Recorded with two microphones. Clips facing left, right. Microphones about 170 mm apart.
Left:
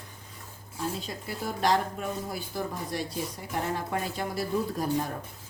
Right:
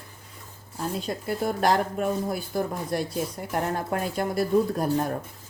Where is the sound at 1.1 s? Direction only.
55° right (ahead or behind).